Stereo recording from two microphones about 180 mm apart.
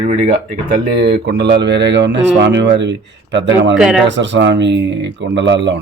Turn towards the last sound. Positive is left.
turn(degrees=-75)  # may be behind; listen again after turning